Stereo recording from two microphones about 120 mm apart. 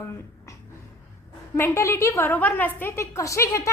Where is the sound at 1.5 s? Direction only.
20° left (ahead or behind).